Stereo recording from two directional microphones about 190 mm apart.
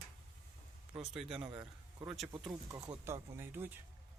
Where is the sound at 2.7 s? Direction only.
15° right (ahead or behind).